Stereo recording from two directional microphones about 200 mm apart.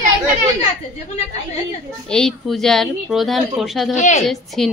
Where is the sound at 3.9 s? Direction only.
35° left (ahead or behind).